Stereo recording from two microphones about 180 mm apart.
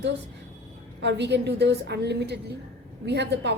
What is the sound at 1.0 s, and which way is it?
A woman's voice, 70° right (ahead or behind).